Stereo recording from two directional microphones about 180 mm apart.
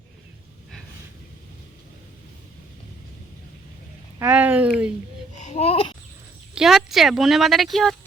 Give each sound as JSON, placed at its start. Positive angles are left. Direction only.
{"t": 4.2, "sound": "speech", "side_deg": -10}
{"t": 5.4, "sound": "babbling", "side_deg": 40}
{"t": 6.5, "sound": "speech", "side_deg": -5}